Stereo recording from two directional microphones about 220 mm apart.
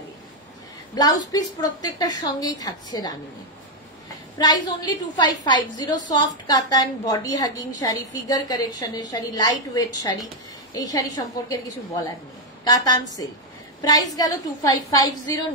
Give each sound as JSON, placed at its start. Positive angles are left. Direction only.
{"t": 0.9, "sound": "a woman's voice", "side_deg": 15}
{"t": 4.4, "sound": "a woman's voice", "side_deg": 20}
{"t": 12.6, "sound": "a woman's voice", "side_deg": 15}